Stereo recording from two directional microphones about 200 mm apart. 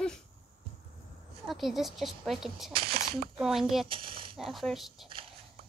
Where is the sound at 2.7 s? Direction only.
25° right (ahead or behind).